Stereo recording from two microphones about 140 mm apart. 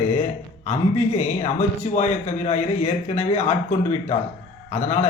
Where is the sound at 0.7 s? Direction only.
50° left (ahead or behind).